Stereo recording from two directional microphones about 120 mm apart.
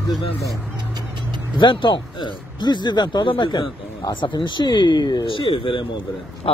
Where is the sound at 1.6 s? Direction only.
40° left (ahead or behind).